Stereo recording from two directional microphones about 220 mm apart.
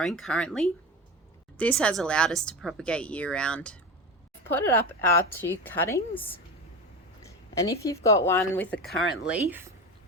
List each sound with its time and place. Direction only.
0.0 s speech: centre (ahead or behind)
4.9 s speech: 10° left (ahead or behind); by 9.7 s 10° right (ahead or behind)